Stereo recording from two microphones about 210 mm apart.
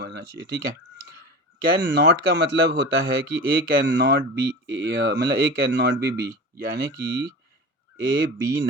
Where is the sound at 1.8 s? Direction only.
60° right (ahead or behind).